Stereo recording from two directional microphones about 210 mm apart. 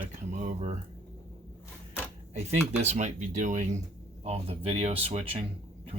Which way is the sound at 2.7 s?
35° right (ahead or behind).